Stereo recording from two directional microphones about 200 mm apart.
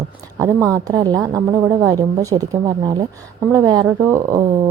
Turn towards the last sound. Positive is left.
turn(degrees=-15)  # may be behind; listen again after turning